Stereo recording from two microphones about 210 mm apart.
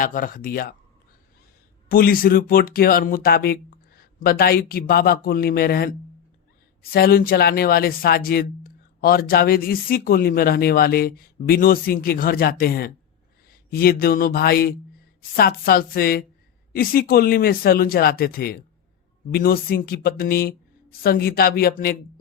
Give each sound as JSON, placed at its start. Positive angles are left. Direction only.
{"t": 0.0, "sound": "speech", "side_deg": 40}
{"t": 1.9, "sound": "speech", "side_deg": 45}
{"t": 6.9, "sound": "speech", "side_deg": 45}